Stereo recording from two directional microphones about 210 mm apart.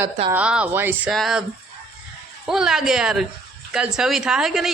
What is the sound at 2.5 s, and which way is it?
A woman's voice, centre (ahead or behind).